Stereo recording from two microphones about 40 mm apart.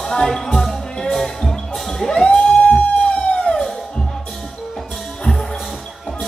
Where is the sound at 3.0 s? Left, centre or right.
Left.